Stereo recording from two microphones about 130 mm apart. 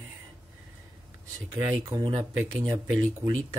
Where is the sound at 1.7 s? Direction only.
25° right (ahead or behind).